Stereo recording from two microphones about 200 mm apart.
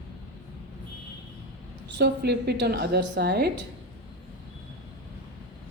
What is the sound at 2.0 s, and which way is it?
A woman's voice, 55° right (ahead or behind).